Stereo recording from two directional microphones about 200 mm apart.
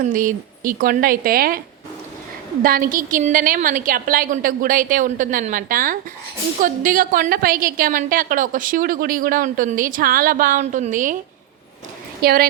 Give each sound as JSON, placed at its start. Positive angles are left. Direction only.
{"t": 0.0, "sound": "a woman's voice", "side_deg": -40}
{"t": 2.6, "sound": "a woman's voice", "side_deg": -45}
{"t": 12.2, "sound": "a woman's voice", "side_deg": -50}